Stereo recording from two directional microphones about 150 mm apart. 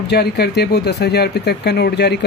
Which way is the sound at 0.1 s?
90° left.